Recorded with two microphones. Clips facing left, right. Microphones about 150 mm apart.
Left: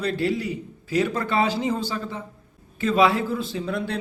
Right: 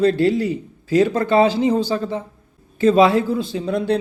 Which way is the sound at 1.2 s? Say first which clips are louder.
Right 7 dB; 25° right (ahead or behind).